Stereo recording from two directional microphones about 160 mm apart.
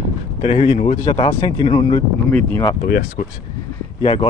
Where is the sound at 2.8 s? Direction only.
60° left (ahead or behind).